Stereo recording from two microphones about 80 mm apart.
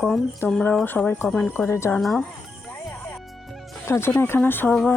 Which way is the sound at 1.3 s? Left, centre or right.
Centre.